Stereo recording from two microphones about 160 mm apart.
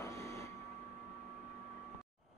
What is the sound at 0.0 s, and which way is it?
Vehicle, 20° left (ahead or behind).